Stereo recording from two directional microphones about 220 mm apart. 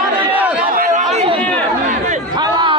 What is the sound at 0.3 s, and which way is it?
Chatter, 5° right (ahead or behind).